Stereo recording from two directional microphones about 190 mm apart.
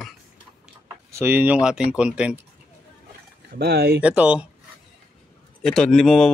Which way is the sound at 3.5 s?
55° right (ahead or behind).